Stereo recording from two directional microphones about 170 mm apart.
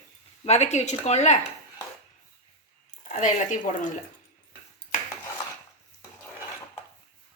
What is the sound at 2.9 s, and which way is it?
Speech, 45° left (ahead or behind).